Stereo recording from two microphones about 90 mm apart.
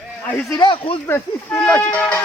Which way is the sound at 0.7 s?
90° left.